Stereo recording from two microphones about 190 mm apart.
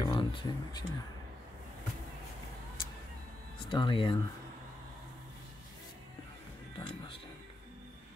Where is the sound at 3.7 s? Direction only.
25° left (ahead or behind).